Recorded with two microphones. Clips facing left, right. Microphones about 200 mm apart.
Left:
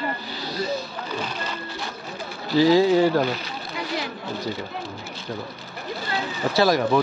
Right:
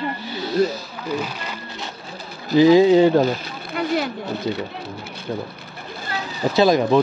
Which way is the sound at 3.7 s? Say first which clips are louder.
Right 8 dB; 60° right (ahead or behind).